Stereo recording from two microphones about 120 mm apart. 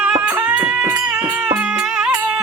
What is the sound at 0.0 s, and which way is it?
Music, 15° right (ahead or behind).